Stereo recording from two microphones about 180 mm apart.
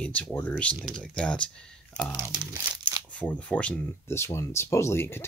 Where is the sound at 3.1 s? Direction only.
10° left (ahead or behind).